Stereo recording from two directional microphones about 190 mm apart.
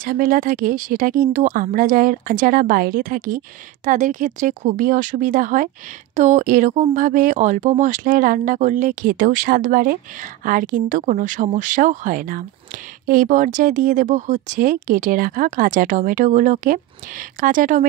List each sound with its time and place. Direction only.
0.0 s speech: 45° right (ahead or behind)